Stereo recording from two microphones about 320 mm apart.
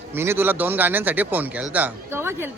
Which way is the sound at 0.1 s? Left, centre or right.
Centre.